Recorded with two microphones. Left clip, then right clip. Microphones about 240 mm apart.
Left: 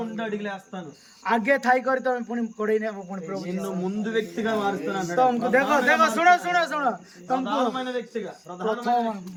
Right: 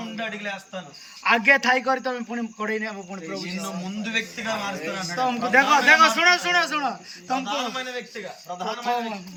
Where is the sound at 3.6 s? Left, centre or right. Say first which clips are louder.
Left 2 dB; left.